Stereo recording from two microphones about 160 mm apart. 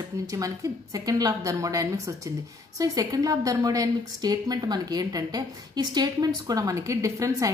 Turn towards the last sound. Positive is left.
turn(degrees=-20)  # may be behind; listen again after turning